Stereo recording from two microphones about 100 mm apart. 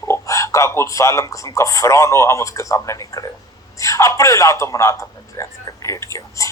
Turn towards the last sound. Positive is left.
turn(degrees=30)  # may be behind; listen again after turning